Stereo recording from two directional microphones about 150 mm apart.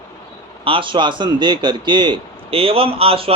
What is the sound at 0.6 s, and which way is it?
A man's voice, 35° right (ahead or behind).